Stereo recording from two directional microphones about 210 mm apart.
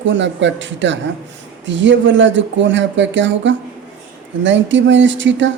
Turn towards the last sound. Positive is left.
turn(degrees=-60)  # may be behind; listen again after turning